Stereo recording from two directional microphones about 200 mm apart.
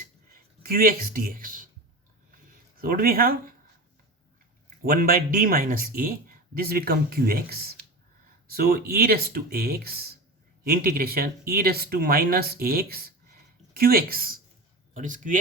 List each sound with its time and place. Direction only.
0.6 s speech: 50° right (ahead or behind)
2.7 s speech: 45° right (ahead or behind)
4.9 s speech: 45° right (ahead or behind)